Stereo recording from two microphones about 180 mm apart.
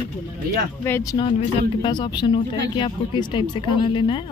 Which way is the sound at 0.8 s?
15° left (ahead or behind).